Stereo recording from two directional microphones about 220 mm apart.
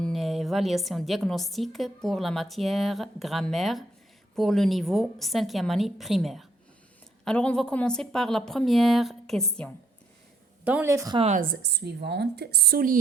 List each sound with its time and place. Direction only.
0.0 s a woman's voice: centre (ahead or behind)
11.2 s a woman's voice: 30° right (ahead or behind)
11.6 s speech: 50° right (ahead or behind)